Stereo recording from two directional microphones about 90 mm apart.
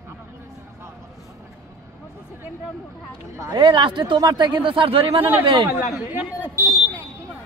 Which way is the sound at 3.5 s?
65° right (ahead or behind).